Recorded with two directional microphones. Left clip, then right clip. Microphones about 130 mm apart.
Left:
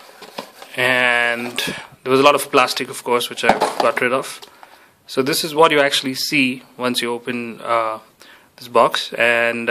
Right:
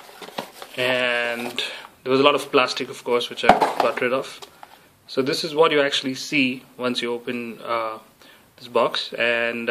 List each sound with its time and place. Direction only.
0.7 s speech: 35° left (ahead or behind)